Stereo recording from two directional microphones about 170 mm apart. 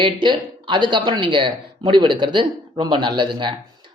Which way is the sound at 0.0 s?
25° right (ahead or behind).